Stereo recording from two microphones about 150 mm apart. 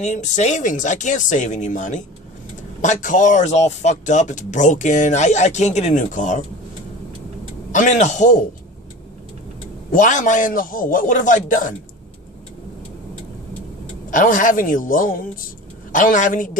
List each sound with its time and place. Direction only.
0.0 s speech: 55° left (ahead or behind)
7.7 s speech: 55° left (ahead or behind)
9.9 s speech: 55° left (ahead or behind)
14.1 s speech: 60° left (ahead or behind)